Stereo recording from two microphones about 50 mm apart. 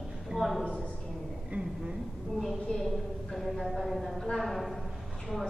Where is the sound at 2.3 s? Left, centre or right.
Centre.